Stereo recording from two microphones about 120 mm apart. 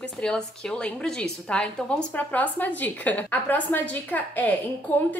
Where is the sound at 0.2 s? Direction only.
5° left (ahead or behind).